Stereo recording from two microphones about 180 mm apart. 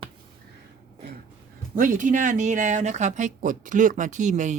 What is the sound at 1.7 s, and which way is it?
Speech, 45° right (ahead or behind).